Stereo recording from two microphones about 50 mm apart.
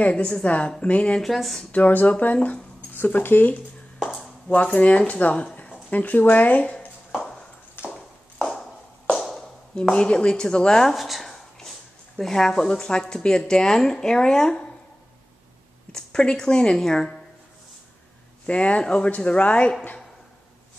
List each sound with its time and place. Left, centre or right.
0.0 s speech: centre
1.2 s speech: centre
1.7 s speech: left
2.3 s a sound: left
3.0 s speech: left; by 5.8 s centre
5.9 s speech: left
8.5 s a sound: centre
9.8 s chopping: left
11.0 s a sound: centre
12.2 s chopping: centre
15.9 s a woman's voice: centre
16.8 s chopping: centre
18.5 s speech: left